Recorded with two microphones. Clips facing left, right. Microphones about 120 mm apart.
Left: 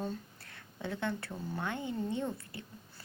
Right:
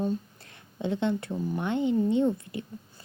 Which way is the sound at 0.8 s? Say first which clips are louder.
Right 9 dB; 20° right (ahead or behind).